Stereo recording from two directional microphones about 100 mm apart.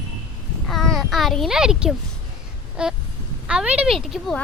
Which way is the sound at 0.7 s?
5° left (ahead or behind).